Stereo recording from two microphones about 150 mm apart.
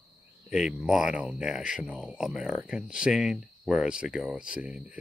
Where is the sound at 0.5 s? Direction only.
5° right (ahead or behind).